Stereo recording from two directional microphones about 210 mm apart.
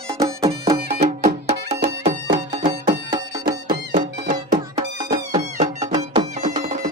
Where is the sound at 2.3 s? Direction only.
20° right (ahead or behind).